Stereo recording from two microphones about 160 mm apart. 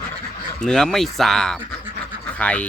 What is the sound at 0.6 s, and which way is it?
Speech, 5° left (ahead or behind).